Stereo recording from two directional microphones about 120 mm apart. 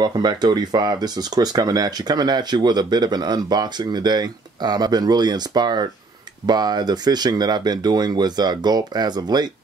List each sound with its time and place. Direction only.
0.0 s speech: 35° right (ahead or behind)